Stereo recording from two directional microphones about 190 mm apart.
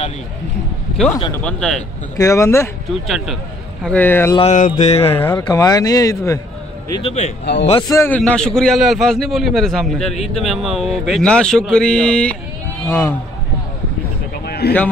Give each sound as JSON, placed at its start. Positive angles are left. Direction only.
{"t": 1.1, "sound": "speech", "side_deg": 20}
{"t": 1.4, "sound": "a man's voice", "side_deg": 5}
{"t": 2.9, "sound": "a man's voice", "side_deg": 0}
{"t": 4.4, "sound": "mantra", "side_deg": 40}
{"t": 5.0, "sound": "speech", "side_deg": 10}
{"t": 7.0, "sound": "mantra", "side_deg": 30}
{"t": 7.9, "sound": "a man's voice", "side_deg": 15}
{"t": 14.4, "sound": "a sound", "side_deg": 55}